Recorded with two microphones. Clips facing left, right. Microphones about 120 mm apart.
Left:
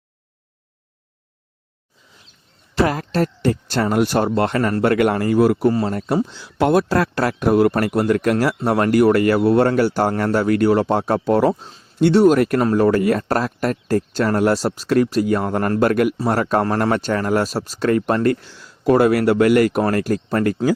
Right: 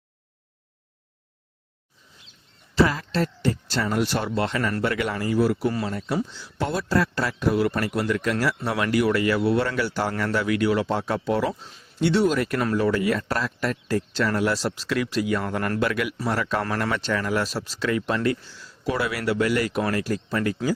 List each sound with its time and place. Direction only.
2.7 s a man's voice: 55° left (ahead or behind)
6.2 s a man's voice: 65° left (ahead or behind); by 20.6 s 50° left (ahead or behind)